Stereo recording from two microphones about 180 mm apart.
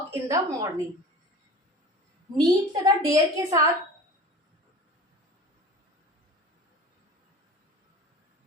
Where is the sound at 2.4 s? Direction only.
20° right (ahead or behind).